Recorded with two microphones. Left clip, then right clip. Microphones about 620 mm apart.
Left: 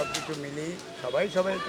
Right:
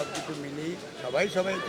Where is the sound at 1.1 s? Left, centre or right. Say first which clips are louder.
Left 1 dB; centre.